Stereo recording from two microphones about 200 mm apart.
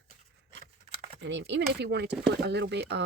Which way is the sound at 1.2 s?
60° right (ahead or behind).